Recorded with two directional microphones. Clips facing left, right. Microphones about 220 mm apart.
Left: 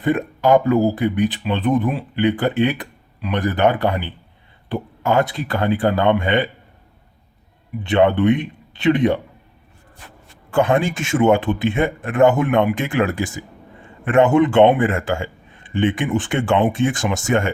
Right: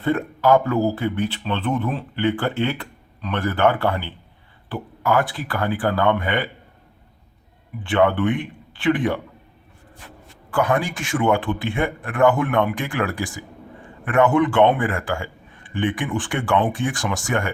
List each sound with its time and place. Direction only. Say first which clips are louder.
0.0 s speech: left 2 dB; 15° left (ahead or behind)
7.9 s speech: left 4 dB; 20° left (ahead or behind)
10.5 s speech: left 4 dB; 25° left (ahead or behind)